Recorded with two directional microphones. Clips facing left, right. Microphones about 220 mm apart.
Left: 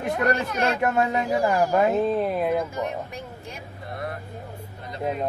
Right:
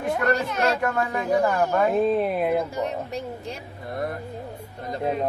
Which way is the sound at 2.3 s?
5° right (ahead or behind).